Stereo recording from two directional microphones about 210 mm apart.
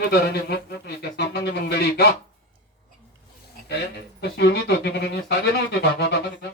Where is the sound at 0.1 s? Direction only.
50° left (ahead or behind).